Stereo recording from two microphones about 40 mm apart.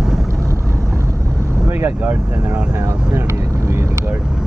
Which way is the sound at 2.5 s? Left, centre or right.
Right.